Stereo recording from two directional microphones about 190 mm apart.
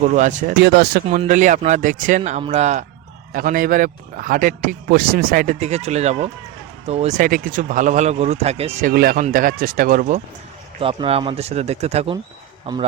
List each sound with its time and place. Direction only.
0.0 s speech: 40° right (ahead or behind)
0.5 s speech: 60° right (ahead or behind)
1.1 s a man's voice: 40° right (ahead or behind)
8.8 s a man's voice: 50° right (ahead or behind)
10.8 s speech: 30° right (ahead or behind)